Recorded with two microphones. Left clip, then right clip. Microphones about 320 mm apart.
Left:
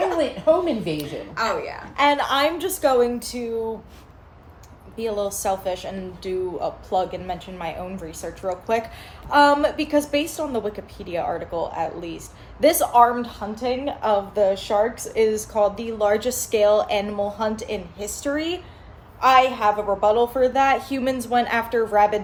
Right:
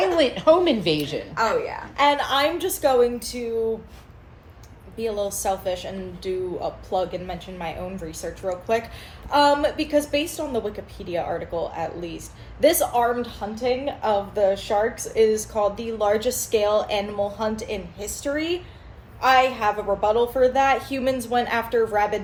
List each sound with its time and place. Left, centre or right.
0.2 s a woman's voice: right
1.4 s a woman's voice: centre
2.0 s a woman's voice: centre
4.9 s a woman's voice: centre